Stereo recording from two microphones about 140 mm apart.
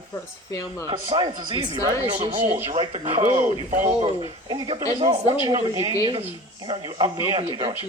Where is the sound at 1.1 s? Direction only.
35° right (ahead or behind).